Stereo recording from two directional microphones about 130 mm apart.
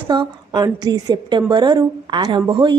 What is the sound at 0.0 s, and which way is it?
A woman's voice, 35° right (ahead or behind).